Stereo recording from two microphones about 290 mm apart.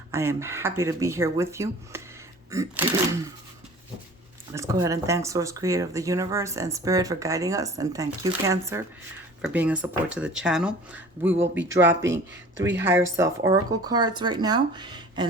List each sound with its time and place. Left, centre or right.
0.1 s speech: centre
4.5 s speech: centre